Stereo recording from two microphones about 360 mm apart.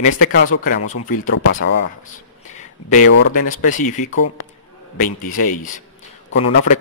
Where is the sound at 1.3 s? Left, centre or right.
Left.